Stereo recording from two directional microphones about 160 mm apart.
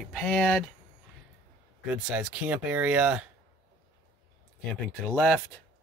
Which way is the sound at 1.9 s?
5° right (ahead or behind).